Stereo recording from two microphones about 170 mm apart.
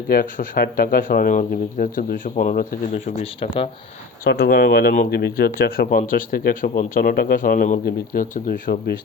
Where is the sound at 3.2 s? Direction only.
30° left (ahead or behind).